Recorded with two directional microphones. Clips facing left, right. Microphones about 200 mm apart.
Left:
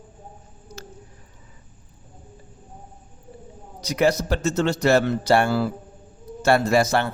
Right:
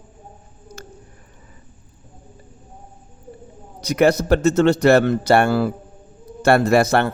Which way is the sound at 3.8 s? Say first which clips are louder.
Right 4 dB; 60° right (ahead or behind).